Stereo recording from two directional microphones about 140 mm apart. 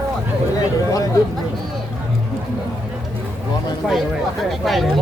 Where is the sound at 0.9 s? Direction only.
25° left (ahead or behind).